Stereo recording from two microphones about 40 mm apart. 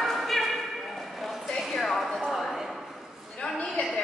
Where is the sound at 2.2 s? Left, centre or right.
Centre.